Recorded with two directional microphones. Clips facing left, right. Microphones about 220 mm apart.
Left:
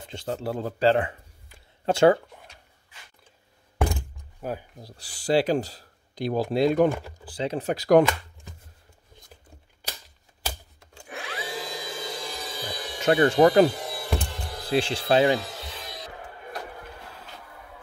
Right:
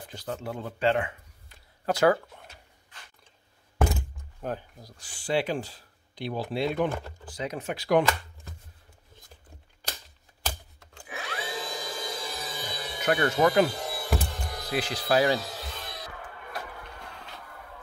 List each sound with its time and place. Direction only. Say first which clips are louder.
0.0 s speech: left 4 dB; 25° left (ahead or behind)
2.3 s drawer open or close: left 1 dB; 5° right (ahead or behind)
3.7 s a sound: even; centre (ahead or behind)
4.7 s speech: left 4 dB; 30° left (ahead or behind)
7.2 s speech: left 6 dB; 30° left (ahead or behind)
11.1 s tools: left 1 dB; centre (ahead or behind)
13.0 s speech: left 6 dB; 30° left (ahead or behind)
13.7 s music: even; centre (ahead or behind)
14.7 s speech: left 4 dB; 30° left (ahead or behind)
15.4 s a sound: even; centre (ahead or behind)
15.9 s music: left 2 dB; 20° left (ahead or behind)